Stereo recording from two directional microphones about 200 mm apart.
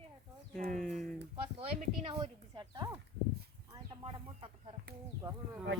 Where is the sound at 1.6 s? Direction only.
30° right (ahead or behind).